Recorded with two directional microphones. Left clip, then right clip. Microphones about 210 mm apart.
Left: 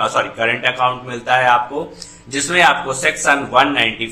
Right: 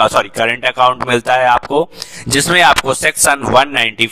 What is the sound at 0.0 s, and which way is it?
A man's voice, 50° right (ahead or behind).